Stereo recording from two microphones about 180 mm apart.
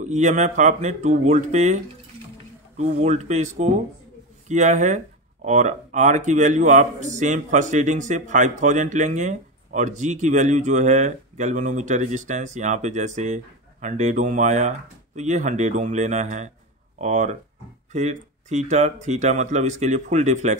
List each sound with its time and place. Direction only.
0.0 s speech: 40° right (ahead or behind)
2.8 s speech: 40° right (ahead or behind)
4.5 s speech: 40° right (ahead or behind)